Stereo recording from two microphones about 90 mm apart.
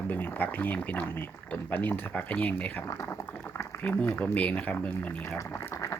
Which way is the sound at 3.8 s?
20° left (ahead or behind).